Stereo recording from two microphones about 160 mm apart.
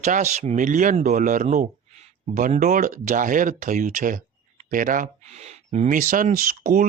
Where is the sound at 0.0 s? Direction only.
45° right (ahead or behind).